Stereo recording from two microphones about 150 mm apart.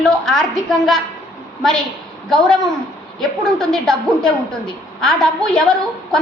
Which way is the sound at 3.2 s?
5° left (ahead or behind).